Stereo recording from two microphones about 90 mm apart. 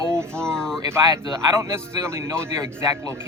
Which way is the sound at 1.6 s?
30° right (ahead or behind).